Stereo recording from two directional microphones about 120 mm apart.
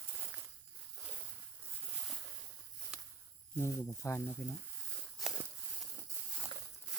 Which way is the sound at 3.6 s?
25° left (ahead or behind).